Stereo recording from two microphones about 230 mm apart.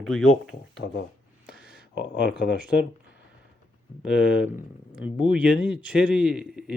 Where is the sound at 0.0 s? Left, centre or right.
Centre.